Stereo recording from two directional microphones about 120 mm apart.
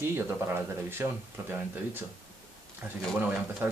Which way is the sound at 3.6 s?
15° right (ahead or behind).